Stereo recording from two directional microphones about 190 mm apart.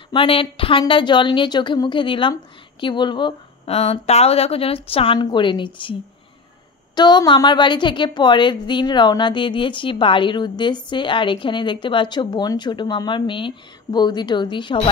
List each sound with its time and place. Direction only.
0.1 s a woman's voice: 30° left (ahead or behind)
7.0 s a woman's voice: 20° left (ahead or behind)